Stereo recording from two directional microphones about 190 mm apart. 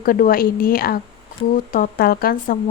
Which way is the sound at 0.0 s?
50° left (ahead or behind).